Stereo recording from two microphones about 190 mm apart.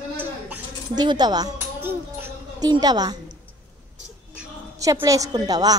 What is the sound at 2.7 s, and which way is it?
Speech, 20° right (ahead or behind).